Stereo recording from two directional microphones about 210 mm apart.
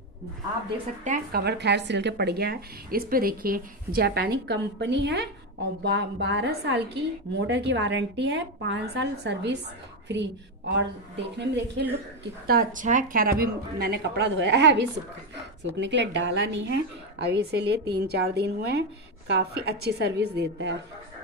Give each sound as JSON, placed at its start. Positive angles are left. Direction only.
{"t": 1.0, "sound": "a woman's voice", "side_deg": -50}
{"t": 12.4, "sound": "a woman's voice", "side_deg": -40}